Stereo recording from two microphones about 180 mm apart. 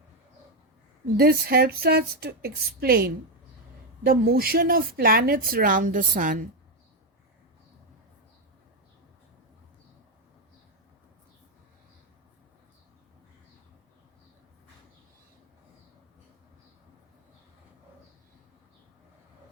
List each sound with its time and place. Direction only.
1.1 s a woman's voice: 55° right (ahead or behind)